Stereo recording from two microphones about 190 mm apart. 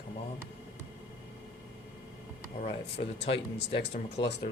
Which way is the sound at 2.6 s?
30° left (ahead or behind).